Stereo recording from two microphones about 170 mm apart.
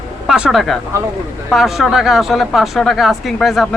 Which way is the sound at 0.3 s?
5° right (ahead or behind).